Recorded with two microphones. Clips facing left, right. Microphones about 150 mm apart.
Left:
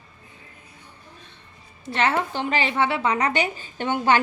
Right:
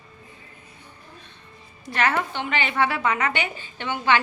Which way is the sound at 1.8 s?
25° left (ahead or behind).